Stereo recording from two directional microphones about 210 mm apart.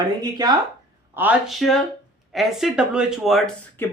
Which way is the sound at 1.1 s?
10° right (ahead or behind).